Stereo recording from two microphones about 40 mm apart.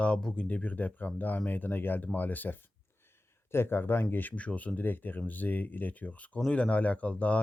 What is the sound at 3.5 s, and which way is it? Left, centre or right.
Speech, left.